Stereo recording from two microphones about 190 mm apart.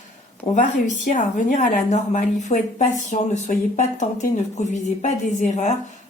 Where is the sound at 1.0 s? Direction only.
40° left (ahead or behind).